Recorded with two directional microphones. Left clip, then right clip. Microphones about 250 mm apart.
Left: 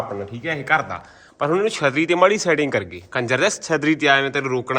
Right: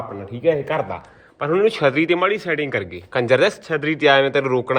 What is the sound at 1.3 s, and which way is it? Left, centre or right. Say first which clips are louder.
Speech: right 2 dB; centre.